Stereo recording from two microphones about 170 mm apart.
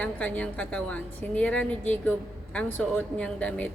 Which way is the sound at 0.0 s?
10° left (ahead or behind).